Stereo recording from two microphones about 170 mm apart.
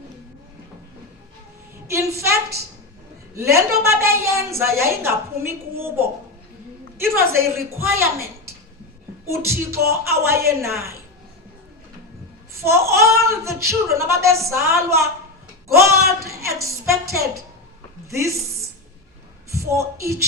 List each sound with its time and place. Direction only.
1.9 s a woman's voice: 15° right (ahead or behind)
3.5 s a woman's voice: 15° right (ahead or behind)
12.6 s a woman's voice: 15° right (ahead or behind)
18.1 s a sound: 15° right (ahead or behind)
19.5 s a woman's voice: 15° right (ahead or behind)